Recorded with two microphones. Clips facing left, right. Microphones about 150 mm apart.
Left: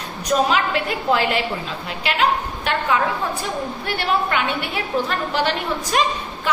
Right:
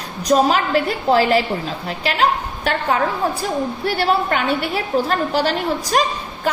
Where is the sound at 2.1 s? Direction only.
40° right (ahead or behind).